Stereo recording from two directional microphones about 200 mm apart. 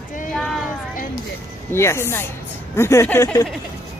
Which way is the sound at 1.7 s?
10° left (ahead or behind).